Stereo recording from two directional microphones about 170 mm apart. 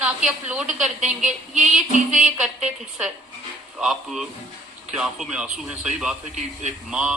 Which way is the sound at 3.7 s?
Centre (ahead or behind).